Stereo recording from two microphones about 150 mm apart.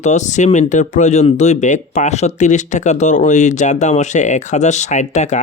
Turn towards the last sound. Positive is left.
turn(degrees=50)  # may be behind; listen again after turning